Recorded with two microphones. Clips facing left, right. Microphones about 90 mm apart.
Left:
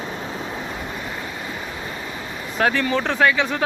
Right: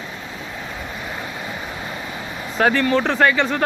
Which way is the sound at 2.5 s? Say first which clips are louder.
Right 3 dB; centre (ahead or behind).